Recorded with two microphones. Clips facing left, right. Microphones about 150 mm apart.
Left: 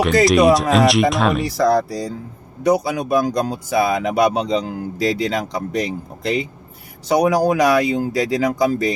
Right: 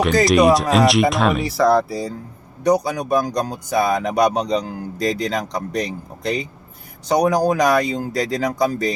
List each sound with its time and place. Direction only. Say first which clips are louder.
0.0 s speech: left 1 dB; centre (ahead or behind)
1.5 s speech: even; 90° left
2.8 s speech: left 2 dB; 5° left (ahead or behind)